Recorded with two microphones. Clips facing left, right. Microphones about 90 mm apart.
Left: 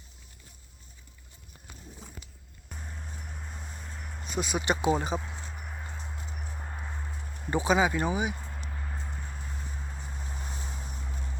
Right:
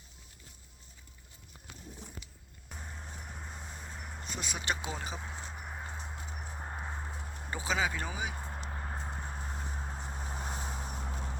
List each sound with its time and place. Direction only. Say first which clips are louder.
2.6 s vehicle: left 2 dB; 5° right (ahead or behind)
4.2 s speech: left 10 dB; 15° left (ahead or behind)
5.5 s a sound: even; 15° right (ahead or behind)
6.1 s clip-clop: left 1 dB; 20° right (ahead or behind)
7.5 s speech: left 8 dB; 20° left (ahead or behind)
8.3 s vehicle: left 1 dB; 30° right (ahead or behind)